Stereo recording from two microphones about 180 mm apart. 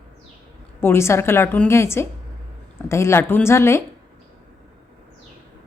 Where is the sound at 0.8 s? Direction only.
15° left (ahead or behind).